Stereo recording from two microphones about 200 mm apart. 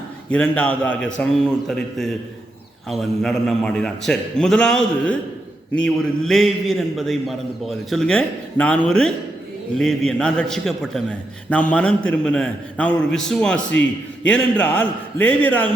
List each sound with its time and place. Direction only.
0.3 s a man's voice: 5° left (ahead or behind)